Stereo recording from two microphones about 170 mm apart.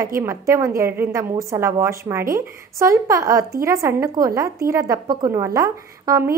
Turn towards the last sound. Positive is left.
turn(degrees=-20)  # may be behind; listen again after turning